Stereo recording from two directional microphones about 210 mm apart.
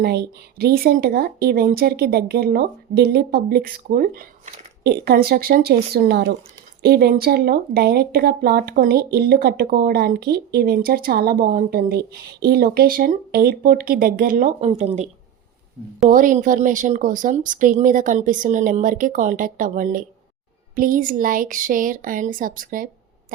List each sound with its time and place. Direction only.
0.0 s a woman's voice: 50° right (ahead or behind)